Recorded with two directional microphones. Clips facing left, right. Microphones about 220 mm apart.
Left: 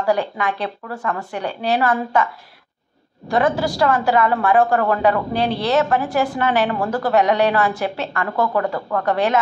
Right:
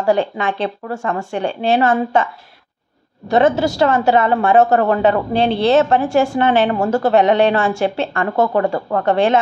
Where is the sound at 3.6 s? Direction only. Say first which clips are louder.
Right 3 dB; 25° right (ahead or behind).